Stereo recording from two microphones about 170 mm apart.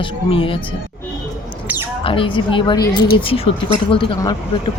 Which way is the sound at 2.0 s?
30° left (ahead or behind).